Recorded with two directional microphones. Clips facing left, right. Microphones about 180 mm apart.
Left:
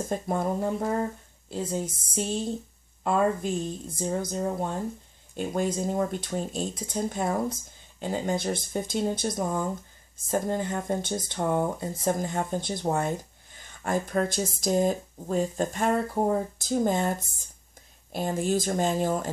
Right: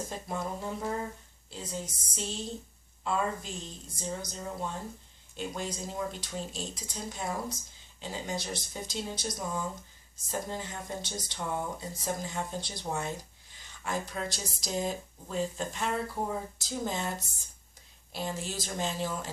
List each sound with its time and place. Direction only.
0.1 s speech: 50° left (ahead or behind)